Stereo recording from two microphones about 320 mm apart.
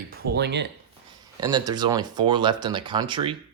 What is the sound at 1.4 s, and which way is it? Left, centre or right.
Speech, centre.